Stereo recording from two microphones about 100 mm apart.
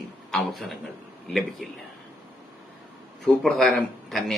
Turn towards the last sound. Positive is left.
turn(degrees=0)  # may be behind; listen again after turning